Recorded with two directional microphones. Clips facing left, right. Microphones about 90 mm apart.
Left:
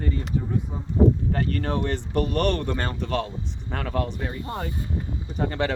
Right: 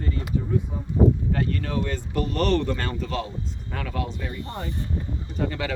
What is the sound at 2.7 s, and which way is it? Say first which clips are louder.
Speech: left 1 dB; 30° left (ahead or behind).